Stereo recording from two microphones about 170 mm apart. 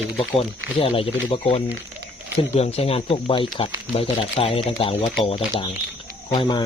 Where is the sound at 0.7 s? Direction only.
35° left (ahead or behind).